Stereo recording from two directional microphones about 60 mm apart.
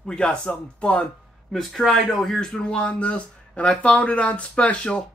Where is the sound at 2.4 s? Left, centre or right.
Centre.